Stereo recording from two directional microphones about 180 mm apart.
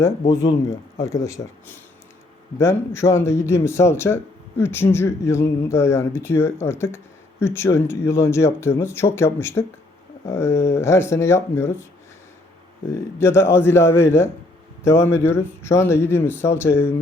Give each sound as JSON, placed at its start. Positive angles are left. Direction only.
{"t": 1.0, "sound": "a man's voice", "side_deg": 15}
{"t": 12.9, "sound": "a man's voice", "side_deg": 15}